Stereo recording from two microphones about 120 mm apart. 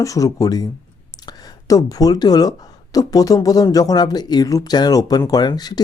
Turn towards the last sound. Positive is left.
turn(degrees=35)  # may be behind; listen again after turning